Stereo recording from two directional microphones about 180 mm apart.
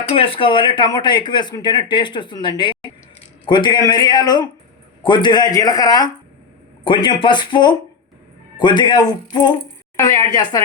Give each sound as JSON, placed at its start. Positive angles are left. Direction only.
{"t": 0.1, "sound": "speech", "side_deg": 30}